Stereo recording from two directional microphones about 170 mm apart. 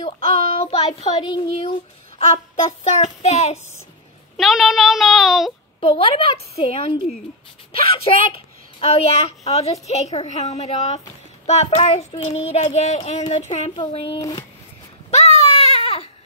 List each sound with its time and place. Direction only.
0.0 s a child's voice: 35° left (ahead or behind)
2.1 s a child's voice: 40° left (ahead or behind)
4.4 s speech: centre (ahead or behind)
5.8 s a child's voice: 30° left (ahead or behind)
15.0 s a sound: 40° left (ahead or behind)
15.4 s baby cry: 40° left (ahead or behind)